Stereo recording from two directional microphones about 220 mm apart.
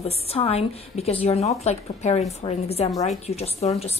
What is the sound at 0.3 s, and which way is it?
Speech, 25° left (ahead or behind).